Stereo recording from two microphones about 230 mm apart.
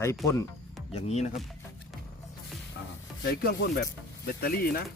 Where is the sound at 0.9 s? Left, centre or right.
Left.